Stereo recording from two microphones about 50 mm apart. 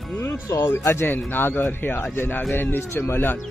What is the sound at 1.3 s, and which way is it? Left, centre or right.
Speech, left.